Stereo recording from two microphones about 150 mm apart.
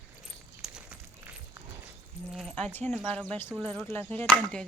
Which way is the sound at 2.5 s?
10° left (ahead or behind).